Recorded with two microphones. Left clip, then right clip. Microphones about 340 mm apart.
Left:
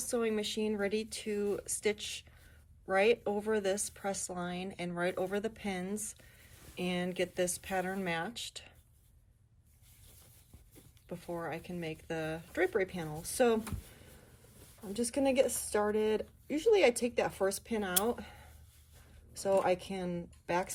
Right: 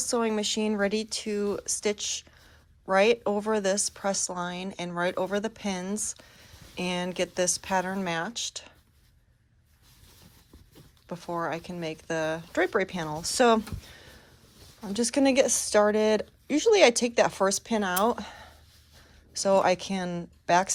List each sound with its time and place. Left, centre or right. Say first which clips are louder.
0.1 s speech: right 6 dB; centre
11.1 s speech: right 8 dB; centre
14.9 s speech: right 7 dB; centre